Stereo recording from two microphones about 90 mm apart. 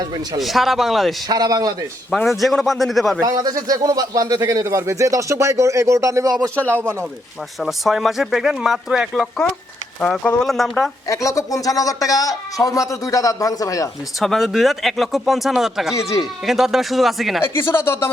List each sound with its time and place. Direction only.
0.3 s speech: centre (ahead or behind)
1.3 s a man's voice: 45° right (ahead or behind)
2.2 s speech: centre (ahead or behind)
3.2 s speech: 40° right (ahead or behind)
7.6 s speech: centre (ahead or behind)
10.4 s speech: centre (ahead or behind)
11.1 s a man's voice: 35° left (ahead or behind)
14.2 s speech: centre (ahead or behind)
16.0 s a man's voice: 35° left (ahead or behind)
16.5 s speech: 5° right (ahead or behind)
17.4 s speech: 25° left (ahead or behind)